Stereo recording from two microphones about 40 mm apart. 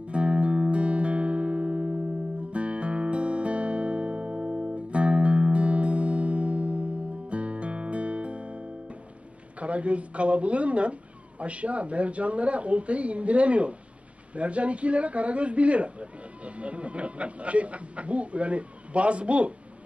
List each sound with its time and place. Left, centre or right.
0.0 s music: right
9.6 s a man's voice: right